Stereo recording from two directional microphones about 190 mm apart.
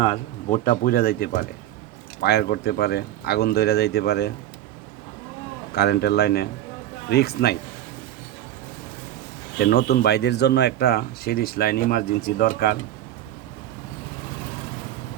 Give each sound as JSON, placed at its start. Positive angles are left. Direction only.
{"t": 0.0, "sound": "speech", "side_deg": 40}
{"t": 5.7, "sound": "speech", "side_deg": 60}
{"t": 9.6, "sound": "speech", "side_deg": 55}